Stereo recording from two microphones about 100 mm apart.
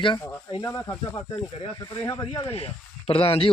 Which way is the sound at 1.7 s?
40° left (ahead or behind).